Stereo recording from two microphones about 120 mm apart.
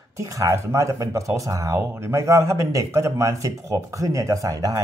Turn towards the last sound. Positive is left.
turn(degrees=-30)  # may be behind; listen again after turning